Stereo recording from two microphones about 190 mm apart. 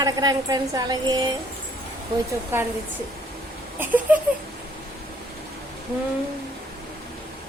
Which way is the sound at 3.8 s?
10° right (ahead or behind).